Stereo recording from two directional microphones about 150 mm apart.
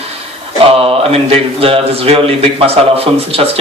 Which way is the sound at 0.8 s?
40° right (ahead or behind).